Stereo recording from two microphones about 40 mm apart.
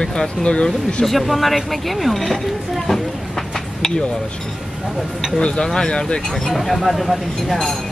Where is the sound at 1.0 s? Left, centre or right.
Centre.